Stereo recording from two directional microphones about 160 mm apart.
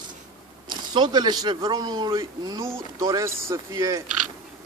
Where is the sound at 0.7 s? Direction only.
25° right (ahead or behind).